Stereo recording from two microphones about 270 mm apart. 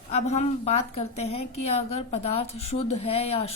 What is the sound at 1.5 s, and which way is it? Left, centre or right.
Speech, left.